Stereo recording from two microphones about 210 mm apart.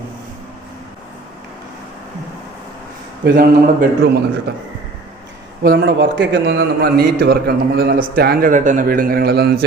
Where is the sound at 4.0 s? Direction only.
50° right (ahead or behind).